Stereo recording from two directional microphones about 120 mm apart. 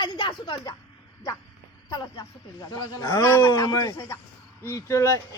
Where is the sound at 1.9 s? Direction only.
35° left (ahead or behind).